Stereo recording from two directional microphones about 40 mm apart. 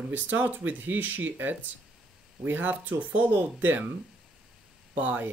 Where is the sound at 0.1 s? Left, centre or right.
Right.